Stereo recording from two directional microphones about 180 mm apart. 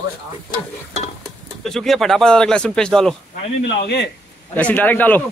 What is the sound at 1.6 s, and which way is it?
Speech, centre (ahead or behind).